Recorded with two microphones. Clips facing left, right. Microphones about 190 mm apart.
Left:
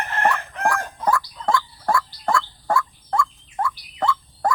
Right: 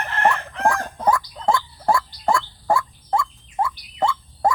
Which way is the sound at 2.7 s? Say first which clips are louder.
Right 2 dB; 20° right (ahead or behind).